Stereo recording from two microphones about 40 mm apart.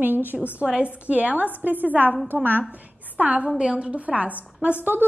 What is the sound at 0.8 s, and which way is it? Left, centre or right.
A woman's voice, right.